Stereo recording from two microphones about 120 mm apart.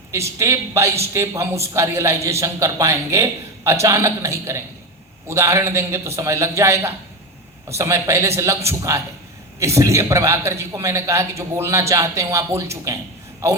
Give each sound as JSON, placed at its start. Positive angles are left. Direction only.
{"t": 0.1, "sound": "a man's voice", "side_deg": -25}